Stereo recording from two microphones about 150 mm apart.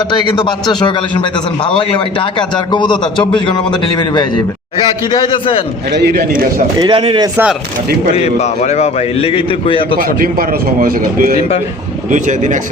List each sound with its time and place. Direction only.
0.1 s a man's voice: 30° left (ahead or behind)
2.7 s a man's voice: 30° left (ahead or behind)
6.0 s a man's voice: 75° right (ahead or behind)
6.7 s speech: 35° right (ahead or behind)
8.1 s a man's voice: 45° left (ahead or behind)
10.0 s a man's voice: 65° right (ahead or behind)
12.1 s speech: 55° right (ahead or behind)